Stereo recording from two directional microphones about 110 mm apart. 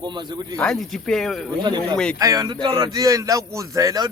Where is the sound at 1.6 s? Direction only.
40° right (ahead or behind).